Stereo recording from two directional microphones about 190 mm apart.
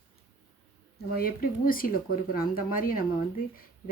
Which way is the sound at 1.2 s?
50° left (ahead or behind).